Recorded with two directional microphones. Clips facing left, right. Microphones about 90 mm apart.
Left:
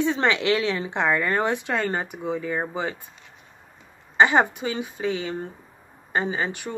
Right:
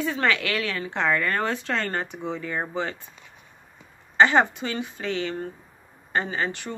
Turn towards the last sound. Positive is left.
turn(degrees=15)  # may be behind; listen again after turning